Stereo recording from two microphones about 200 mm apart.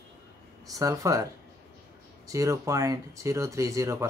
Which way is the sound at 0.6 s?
15° right (ahead or behind).